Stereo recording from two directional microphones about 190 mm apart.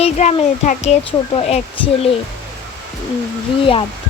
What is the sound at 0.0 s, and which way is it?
Speech, 35° left (ahead or behind).